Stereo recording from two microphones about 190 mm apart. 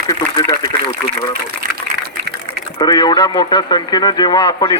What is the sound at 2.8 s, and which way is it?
A man's voice, 20° left (ahead or behind).